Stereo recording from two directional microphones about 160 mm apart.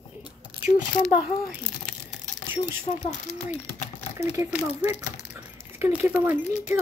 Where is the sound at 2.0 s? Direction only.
15° right (ahead or behind).